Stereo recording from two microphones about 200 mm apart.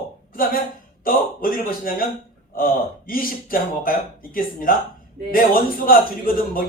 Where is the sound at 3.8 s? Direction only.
45° left (ahead or behind).